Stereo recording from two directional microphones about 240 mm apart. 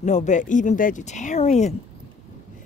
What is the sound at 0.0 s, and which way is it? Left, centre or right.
Speech, left.